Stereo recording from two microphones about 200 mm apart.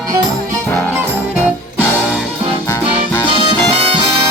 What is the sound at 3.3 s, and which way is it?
Music, 25° right (ahead or behind).